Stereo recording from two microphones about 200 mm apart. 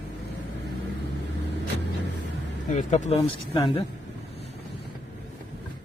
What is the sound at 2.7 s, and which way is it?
Speech, 40° left (ahead or behind).